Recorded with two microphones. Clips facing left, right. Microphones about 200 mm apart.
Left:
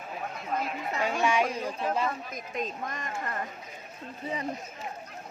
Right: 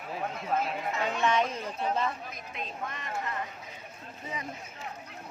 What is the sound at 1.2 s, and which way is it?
Chatter, 10° left (ahead or behind).